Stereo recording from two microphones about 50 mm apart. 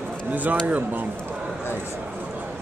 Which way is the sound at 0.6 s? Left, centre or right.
Right.